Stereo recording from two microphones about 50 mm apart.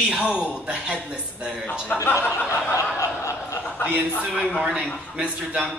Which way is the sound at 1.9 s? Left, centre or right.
Left.